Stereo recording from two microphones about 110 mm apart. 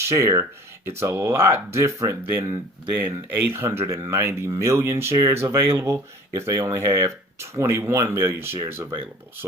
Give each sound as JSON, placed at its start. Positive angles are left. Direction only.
{"t": 0.0, "sound": "speech", "side_deg": -25}